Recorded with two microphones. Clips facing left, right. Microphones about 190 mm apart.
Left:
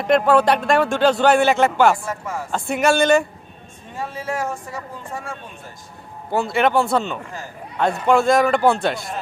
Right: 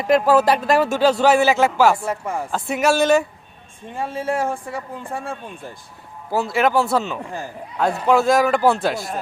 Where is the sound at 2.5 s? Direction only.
5° right (ahead or behind).